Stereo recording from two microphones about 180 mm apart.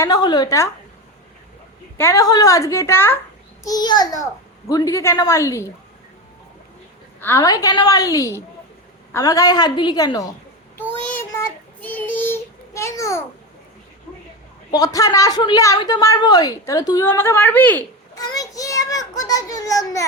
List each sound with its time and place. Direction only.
0.0 s a woman's voice: 20° left (ahead or behind)
2.0 s a child's voice: 15° left (ahead or behind)
7.2 s a woman's voice: 15° left (ahead or behind)
11.1 s child singing: 15° left (ahead or behind)
14.7 s a woman's voice: 20° left (ahead or behind)
18.1 s a child's voice: 20° left (ahead or behind)